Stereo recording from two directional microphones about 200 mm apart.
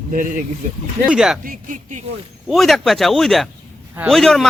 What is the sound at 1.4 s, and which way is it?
Speech, 40° right (ahead or behind).